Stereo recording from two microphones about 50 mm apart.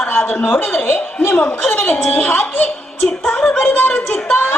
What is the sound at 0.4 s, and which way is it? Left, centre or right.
A woman's voice, left.